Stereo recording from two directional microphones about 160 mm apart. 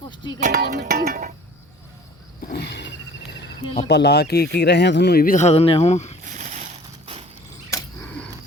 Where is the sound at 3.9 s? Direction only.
90° left; by 5.4 s 65° left (ahead or behind).